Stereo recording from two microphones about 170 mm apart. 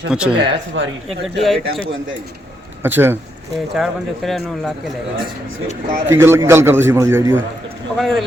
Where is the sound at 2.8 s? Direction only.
15° right (ahead or behind).